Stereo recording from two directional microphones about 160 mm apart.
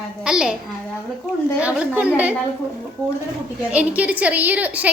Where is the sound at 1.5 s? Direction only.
5° right (ahead or behind).